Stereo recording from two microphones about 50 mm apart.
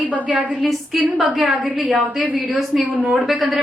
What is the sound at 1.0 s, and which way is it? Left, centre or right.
A woman's voice, right.